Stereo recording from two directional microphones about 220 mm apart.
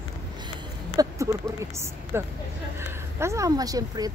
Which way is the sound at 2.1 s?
10° right (ahead or behind).